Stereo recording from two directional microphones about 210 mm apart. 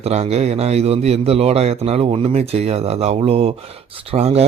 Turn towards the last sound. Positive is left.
turn(degrees=-30)  # may be behind; listen again after turning